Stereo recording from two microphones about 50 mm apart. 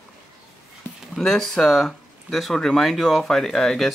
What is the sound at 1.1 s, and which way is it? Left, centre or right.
Speech, centre.